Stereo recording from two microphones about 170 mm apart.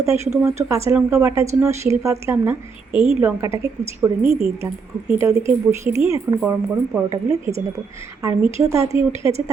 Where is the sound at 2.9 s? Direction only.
30° left (ahead or behind).